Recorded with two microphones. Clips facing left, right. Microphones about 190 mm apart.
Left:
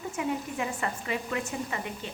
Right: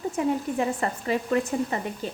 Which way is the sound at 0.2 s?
35° right (ahead or behind).